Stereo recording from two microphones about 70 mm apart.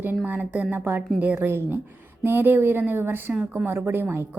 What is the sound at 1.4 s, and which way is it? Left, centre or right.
A woman's voice, right.